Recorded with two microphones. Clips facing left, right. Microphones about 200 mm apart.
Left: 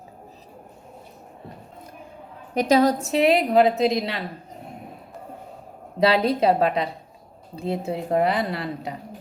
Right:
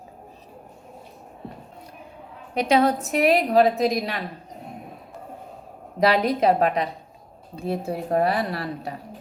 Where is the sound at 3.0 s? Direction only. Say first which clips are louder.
Left 1 dB; 25° left (ahead or behind).